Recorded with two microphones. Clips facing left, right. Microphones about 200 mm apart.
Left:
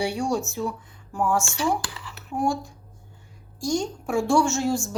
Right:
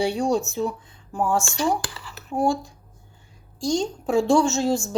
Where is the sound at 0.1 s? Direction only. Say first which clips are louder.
Right 3 dB; 20° right (ahead or behind).